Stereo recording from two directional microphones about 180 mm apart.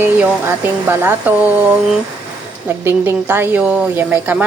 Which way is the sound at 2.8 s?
10° right (ahead or behind).